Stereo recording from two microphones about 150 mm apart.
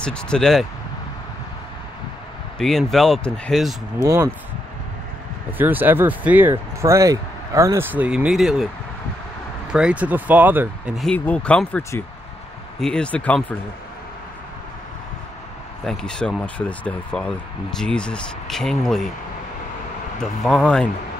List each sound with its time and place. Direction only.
0.0 s speech: 5° left (ahead or behind)
2.6 s speech: centre (ahead or behind)
4.0 s speech: 20° right (ahead or behind)
5.6 s speech: 10° right (ahead or behind)
9.7 s speech: 5° right (ahead or behind)
11.1 s speech: 10° left (ahead or behind)
12.8 s speech: 5° left (ahead or behind)
15.8 s speech: 5° left (ahead or behind)
20.2 s speech: 5° left (ahead or behind)